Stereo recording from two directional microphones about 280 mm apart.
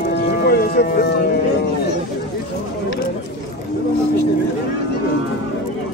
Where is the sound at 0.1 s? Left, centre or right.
Left.